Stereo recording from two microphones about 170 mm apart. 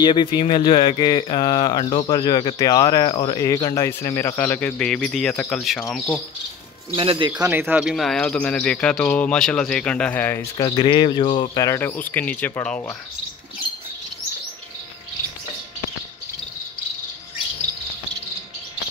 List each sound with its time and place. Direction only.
0.0 s speech: 25° left (ahead or behind)
3.1 s speech: 30° left (ahead or behind)
3.3 s a man's voice: 20° left (ahead or behind); by 6.2 s centre (ahead or behind)
7.0 s speech: 30° right (ahead or behind)
7.4 s speech: 10° right (ahead or behind)
7.9 s a man's voice: centre (ahead or behind)
10.6 s a man's voice: 25° left (ahead or behind)